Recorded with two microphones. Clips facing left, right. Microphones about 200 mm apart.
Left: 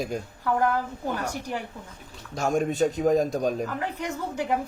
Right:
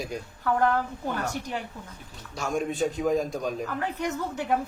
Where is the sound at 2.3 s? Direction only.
45° left (ahead or behind).